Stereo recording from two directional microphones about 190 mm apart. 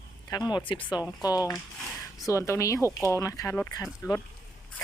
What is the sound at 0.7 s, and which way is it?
Speech, 25° left (ahead or behind).